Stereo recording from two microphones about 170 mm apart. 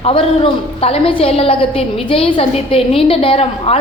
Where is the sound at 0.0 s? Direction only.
30° left (ahead or behind).